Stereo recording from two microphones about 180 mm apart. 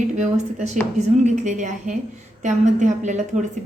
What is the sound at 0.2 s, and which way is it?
A woman's voice, 40° right (ahead or behind).